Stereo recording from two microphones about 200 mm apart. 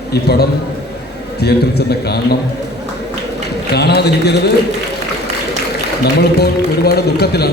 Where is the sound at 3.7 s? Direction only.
55° left (ahead or behind).